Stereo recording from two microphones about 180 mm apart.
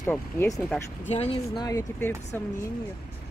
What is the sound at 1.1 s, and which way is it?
Speech, 35° left (ahead or behind).